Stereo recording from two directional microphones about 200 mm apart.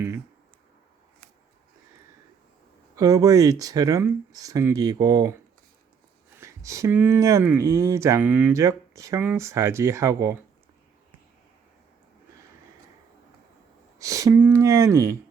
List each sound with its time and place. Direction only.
2.9 s speech: 15° right (ahead or behind)
6.4 s speech: 15° right (ahead or behind)
14.0 s speech: 15° right (ahead or behind)